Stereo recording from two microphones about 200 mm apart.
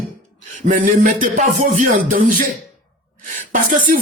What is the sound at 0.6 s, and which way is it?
Speech, 40° right (ahead or behind).